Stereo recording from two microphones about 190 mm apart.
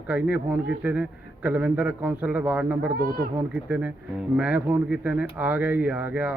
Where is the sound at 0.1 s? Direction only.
10° right (ahead or behind).